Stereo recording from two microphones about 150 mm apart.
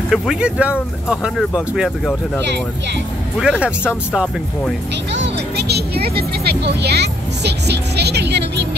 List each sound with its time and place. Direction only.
0.1 s speech: 5° right (ahead or behind)
3.3 s speech: 5° right (ahead or behind)
5.6 s speech: 90° right